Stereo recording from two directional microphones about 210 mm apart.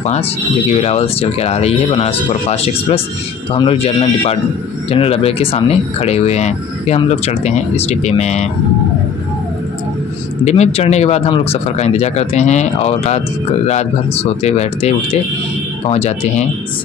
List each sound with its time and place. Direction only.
0.7 s speech: 30° left (ahead or behind)
10.4 s a man's voice: 30° left (ahead or behind)